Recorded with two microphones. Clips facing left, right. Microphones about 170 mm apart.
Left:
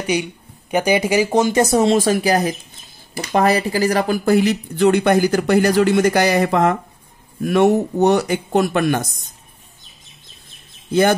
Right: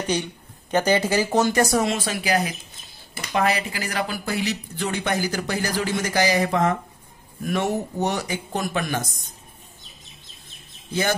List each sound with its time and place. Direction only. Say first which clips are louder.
0.0 s speech: left 4 dB; 10° left (ahead or behind)
2.0 s speech: left 8 dB; 40° left (ahead or behind)
4.2 s speech: left 11 dB; 50° left (ahead or behind)
10.9 s speech: left 9 dB; 55° left (ahead or behind)